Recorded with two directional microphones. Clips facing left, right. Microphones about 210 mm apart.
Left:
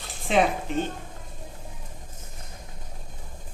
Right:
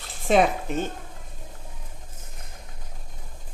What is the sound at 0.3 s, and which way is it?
Speech, 40° right (ahead or behind).